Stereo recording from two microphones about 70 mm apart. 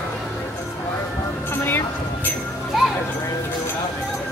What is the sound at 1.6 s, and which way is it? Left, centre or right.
Music, left.